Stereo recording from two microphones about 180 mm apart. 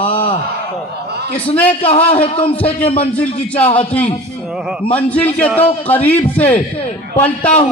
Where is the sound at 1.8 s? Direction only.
35° left (ahead or behind).